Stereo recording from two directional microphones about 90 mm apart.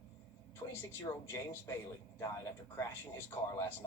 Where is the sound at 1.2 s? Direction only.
30° left (ahead or behind).